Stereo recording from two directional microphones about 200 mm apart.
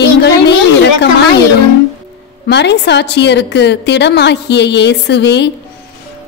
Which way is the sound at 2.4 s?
60° left (ahead or behind).